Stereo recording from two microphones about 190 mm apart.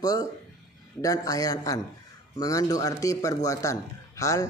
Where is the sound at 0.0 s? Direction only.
20° left (ahead or behind).